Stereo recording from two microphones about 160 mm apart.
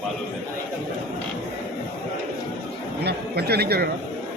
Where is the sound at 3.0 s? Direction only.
90° right.